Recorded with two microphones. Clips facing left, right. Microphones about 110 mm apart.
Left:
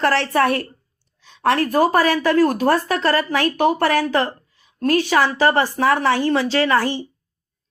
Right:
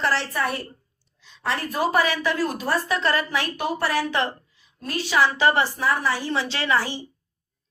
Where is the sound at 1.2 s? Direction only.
60° left (ahead or behind).